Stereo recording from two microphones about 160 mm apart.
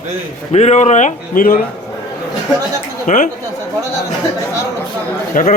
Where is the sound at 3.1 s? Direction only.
50° left (ahead or behind).